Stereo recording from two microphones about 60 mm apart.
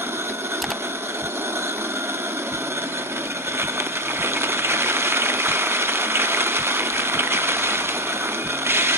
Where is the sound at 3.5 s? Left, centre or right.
Right.